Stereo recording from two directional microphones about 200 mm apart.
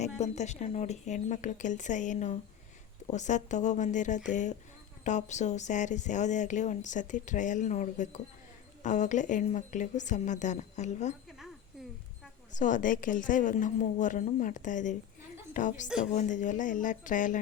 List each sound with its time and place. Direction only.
0.2 s speech: 35° left (ahead or behind)
12.5 s speech: 40° left (ahead or behind)